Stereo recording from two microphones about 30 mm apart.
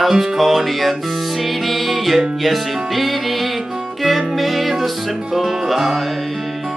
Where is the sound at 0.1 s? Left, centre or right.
Centre.